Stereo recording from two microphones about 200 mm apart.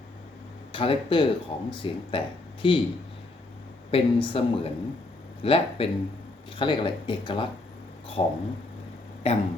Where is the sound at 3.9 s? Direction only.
25° left (ahead or behind).